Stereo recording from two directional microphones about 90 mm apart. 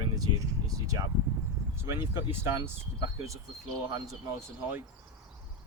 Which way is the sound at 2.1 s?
25° right (ahead or behind).